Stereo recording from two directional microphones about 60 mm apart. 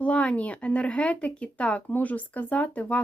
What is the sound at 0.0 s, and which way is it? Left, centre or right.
A woman's voice, left.